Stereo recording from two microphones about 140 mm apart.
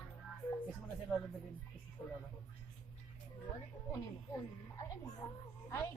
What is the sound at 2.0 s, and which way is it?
Speech, 20° left (ahead or behind).